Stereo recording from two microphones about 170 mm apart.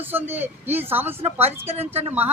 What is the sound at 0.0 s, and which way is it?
Speech, 10° right (ahead or behind).